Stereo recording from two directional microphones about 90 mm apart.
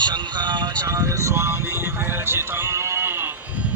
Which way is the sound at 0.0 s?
55° right (ahead or behind).